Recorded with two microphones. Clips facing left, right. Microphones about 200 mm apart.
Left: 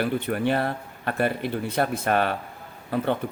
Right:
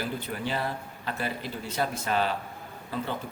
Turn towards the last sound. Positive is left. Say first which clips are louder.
# left 8 dB
turn(degrees=60)  # may be behind; listen again after turning